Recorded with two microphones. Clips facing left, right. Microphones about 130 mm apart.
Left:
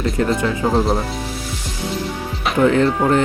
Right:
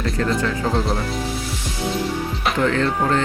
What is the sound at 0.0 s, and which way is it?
Speech, 25° left (ahead or behind).